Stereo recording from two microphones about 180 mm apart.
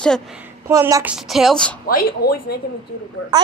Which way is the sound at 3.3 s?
20° right (ahead or behind).